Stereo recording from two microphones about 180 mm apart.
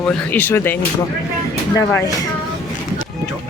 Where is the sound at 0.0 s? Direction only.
10° left (ahead or behind).